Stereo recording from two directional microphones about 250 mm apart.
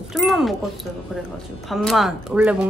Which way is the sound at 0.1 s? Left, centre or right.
Centre.